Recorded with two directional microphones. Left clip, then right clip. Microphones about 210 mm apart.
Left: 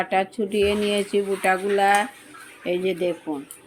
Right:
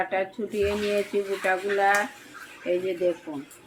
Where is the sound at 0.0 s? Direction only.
45° left (ahead or behind).